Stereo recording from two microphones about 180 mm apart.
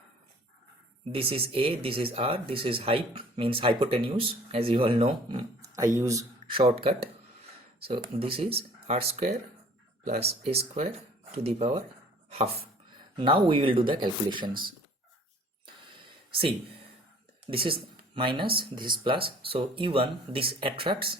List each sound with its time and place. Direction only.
1.1 s speech: 30° right (ahead or behind)
6.6 s speech: 30° right (ahead or behind)
17.4 s speech: 30° right (ahead or behind)